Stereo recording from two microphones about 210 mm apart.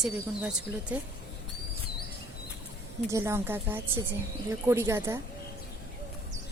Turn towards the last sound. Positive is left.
turn(degrees=-10)  # may be behind; listen again after turning